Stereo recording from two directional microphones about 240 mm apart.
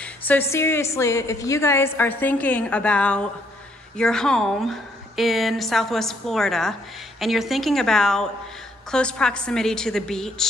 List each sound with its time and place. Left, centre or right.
0.0 s a woman's voice: centre